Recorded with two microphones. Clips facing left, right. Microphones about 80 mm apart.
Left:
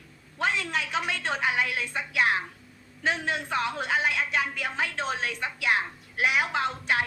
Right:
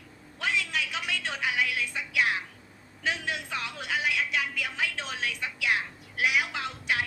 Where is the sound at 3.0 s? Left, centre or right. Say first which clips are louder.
Left 3 dB; left.